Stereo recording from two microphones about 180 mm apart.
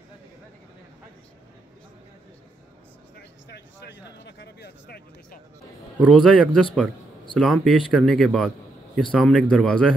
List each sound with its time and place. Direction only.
3.2 s a sound: 65° left (ahead or behind)
4.1 s speech: 70° left (ahead or behind)
6.1 s speech: 5° left (ahead or behind)